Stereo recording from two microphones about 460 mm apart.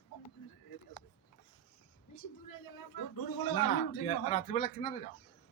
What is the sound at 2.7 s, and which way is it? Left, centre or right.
Speech, left.